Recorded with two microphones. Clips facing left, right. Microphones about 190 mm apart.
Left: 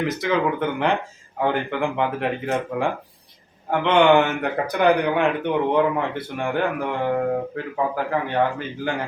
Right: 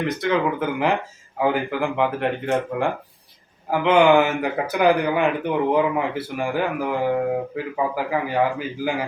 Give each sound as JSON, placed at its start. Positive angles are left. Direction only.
{"t": 0.0, "sound": "speech", "side_deg": 0}